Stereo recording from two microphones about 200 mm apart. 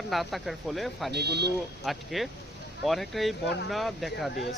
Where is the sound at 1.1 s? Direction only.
55° right (ahead or behind).